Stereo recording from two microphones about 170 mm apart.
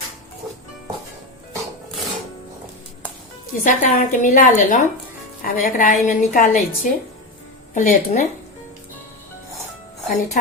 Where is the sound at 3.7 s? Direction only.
50° left (ahead or behind).